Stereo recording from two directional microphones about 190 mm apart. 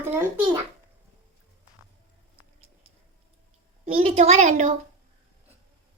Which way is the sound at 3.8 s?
30° right (ahead or behind).